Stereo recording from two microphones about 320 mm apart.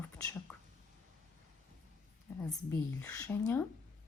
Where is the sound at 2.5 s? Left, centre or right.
Centre.